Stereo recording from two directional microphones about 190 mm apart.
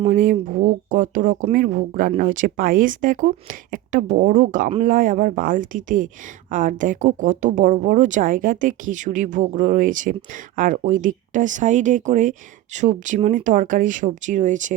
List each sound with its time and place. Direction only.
0.0 s speech: 45° right (ahead or behind)